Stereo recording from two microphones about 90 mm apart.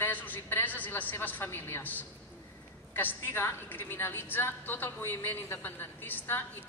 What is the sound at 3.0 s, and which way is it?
A woman's voice, 25° left (ahead or behind).